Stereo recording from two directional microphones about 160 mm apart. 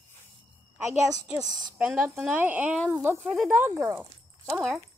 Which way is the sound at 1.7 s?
5° right (ahead or behind).